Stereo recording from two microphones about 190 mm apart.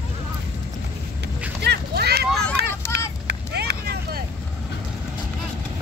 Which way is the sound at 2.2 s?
Centre (ahead or behind).